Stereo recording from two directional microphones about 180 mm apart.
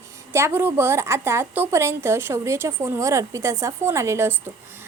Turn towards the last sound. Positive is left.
turn(degrees=-15)  # may be behind; listen again after turning